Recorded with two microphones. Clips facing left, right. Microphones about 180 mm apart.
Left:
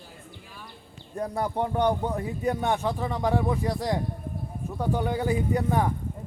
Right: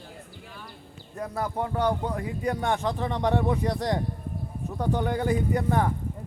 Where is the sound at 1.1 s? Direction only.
25° left (ahead or behind).